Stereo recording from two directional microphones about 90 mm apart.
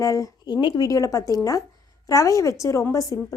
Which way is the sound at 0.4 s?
55° left (ahead or behind).